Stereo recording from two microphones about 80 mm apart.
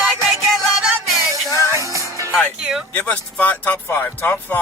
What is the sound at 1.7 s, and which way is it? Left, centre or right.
Music, right.